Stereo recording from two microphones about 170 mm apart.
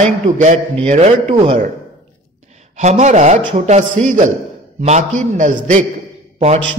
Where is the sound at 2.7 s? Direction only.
40° right (ahead or behind).